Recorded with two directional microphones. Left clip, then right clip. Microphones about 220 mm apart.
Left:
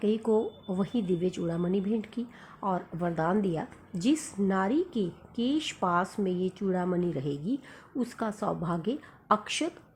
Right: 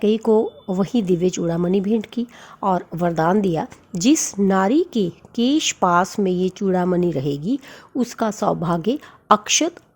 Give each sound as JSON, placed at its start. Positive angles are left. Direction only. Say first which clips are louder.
{"t": 0.0, "sound": "speech", "louder": "right 10 dB", "side_deg": -45}